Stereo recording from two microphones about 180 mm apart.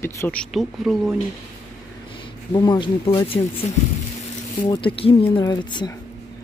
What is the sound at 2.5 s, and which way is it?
Speech, 25° left (ahead or behind).